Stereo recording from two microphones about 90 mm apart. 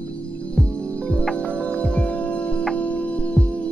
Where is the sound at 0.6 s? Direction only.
10° left (ahead or behind).